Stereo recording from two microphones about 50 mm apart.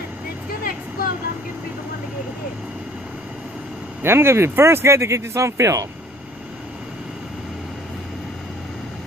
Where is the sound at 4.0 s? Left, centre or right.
Right.